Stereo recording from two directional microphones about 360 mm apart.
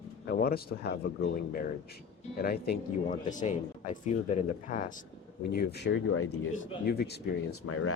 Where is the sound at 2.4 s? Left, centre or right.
Left.